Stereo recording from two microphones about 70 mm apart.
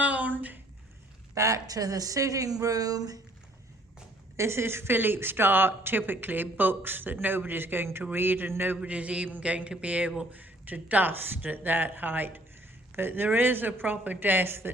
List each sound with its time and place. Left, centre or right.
0.0 s a sound: right
1.4 s speech: right
4.4 s a woman's voice: right
8.8 s a man's voice: centre; by 14.7 s right